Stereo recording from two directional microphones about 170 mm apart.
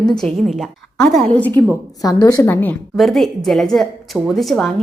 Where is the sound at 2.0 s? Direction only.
20° left (ahead or behind).